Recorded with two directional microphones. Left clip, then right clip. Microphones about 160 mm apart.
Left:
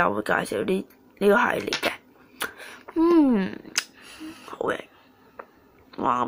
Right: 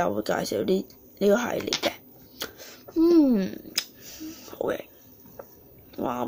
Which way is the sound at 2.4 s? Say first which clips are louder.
Left 5 dB; 5° right (ahead or behind).